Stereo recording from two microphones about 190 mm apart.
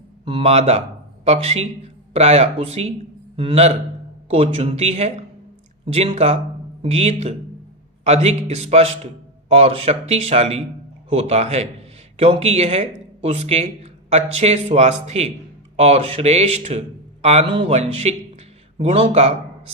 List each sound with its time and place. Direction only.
0.3 s a man's voice: 30° right (ahead or behind)